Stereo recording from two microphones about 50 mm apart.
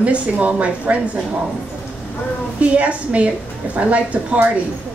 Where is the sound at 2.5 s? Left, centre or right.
Right.